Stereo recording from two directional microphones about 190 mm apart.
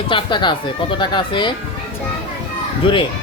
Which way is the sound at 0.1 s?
25° left (ahead or behind).